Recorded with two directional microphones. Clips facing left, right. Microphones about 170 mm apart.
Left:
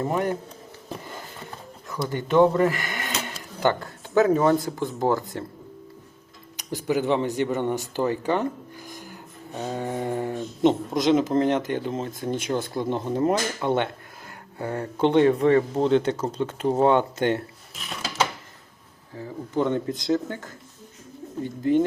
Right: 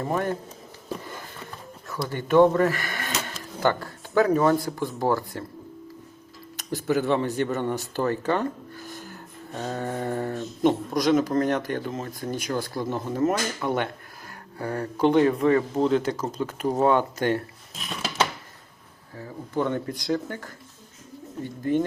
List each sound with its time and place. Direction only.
0.0 s speech: 15° left (ahead or behind)
2.0 s speech: 15° left (ahead or behind)
6.6 s speech: 15° left (ahead or behind)
19.1 s speech: 20° left (ahead or behind)